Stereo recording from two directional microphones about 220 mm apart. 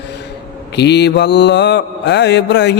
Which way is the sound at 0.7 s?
50° left (ahead or behind).